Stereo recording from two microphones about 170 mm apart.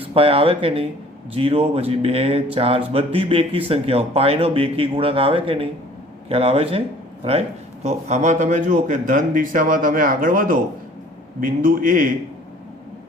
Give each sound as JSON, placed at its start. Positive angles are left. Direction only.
{"t": 0.0, "sound": "speech", "side_deg": -30}
{"t": 7.9, "sound": "speech", "side_deg": -40}